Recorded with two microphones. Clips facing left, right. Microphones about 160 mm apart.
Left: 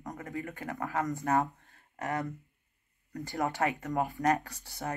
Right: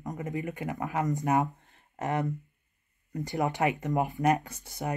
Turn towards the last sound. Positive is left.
turn(degrees=-20)  # may be behind; listen again after turning